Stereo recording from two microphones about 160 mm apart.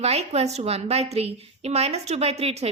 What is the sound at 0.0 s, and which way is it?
A woman's voice, 40° right (ahead or behind).